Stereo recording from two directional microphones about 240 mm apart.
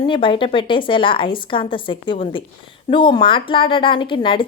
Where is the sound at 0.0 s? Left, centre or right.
Left.